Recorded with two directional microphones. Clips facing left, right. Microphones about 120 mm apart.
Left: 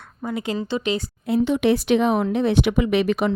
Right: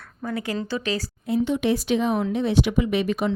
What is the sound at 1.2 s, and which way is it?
A woman's voice, 75° left (ahead or behind).